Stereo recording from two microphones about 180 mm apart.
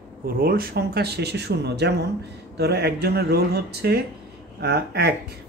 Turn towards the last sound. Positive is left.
turn(degrees=-65)  # may be behind; listen again after turning